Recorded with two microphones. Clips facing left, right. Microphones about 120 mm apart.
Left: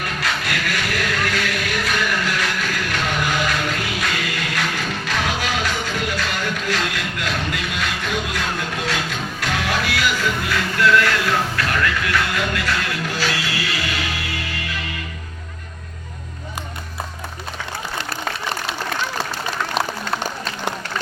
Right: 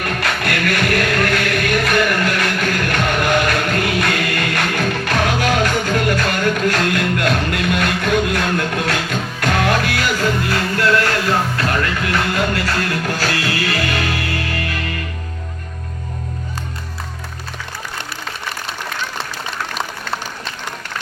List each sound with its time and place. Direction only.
0.0 s music: 55° right (ahead or behind)